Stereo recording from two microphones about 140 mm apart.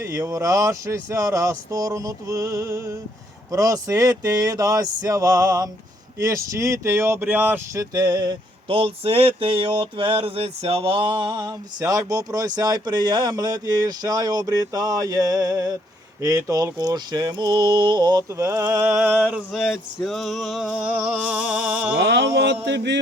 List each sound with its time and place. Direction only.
0.0 s speech: 25° right (ahead or behind)
18.4 s a sound: 15° right (ahead or behind)
19.3 s male singing: centre (ahead or behind)